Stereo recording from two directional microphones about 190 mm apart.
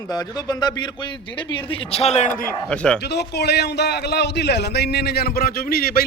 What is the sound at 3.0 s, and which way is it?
A man's voice, 60° left (ahead or behind).